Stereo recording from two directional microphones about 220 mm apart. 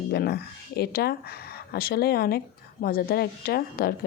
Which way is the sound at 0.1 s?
45° left (ahead or behind).